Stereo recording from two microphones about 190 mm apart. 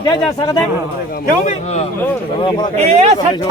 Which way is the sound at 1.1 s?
40° left (ahead or behind).